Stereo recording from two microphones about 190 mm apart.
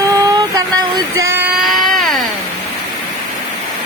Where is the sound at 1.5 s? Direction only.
Centre (ahead or behind).